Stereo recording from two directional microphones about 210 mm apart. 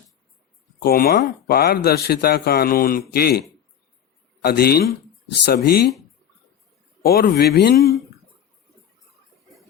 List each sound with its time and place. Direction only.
0.8 s a man's voice: 45° left (ahead or behind)
4.4 s a man's voice: 45° left (ahead or behind)
7.0 s a man's voice: 45° left (ahead or behind)